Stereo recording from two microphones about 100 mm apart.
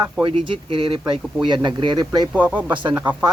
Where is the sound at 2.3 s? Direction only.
15° right (ahead or behind).